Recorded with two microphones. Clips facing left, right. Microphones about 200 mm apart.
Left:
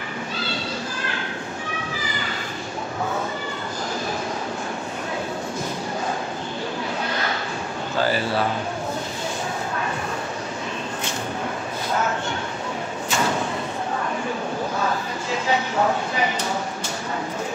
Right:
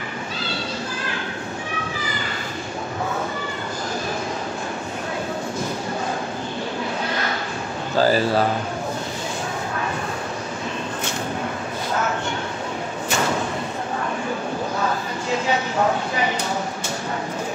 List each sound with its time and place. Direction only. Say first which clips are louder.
8.0 s a man's voice: right 5 dB; 40° right (ahead or behind)